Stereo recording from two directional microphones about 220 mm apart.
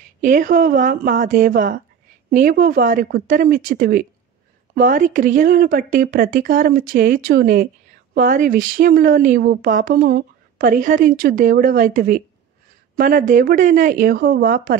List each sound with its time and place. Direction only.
0.2 s speech: 35° right (ahead or behind)